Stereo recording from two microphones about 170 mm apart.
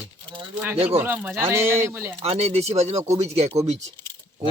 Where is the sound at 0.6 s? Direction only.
10° right (ahead or behind).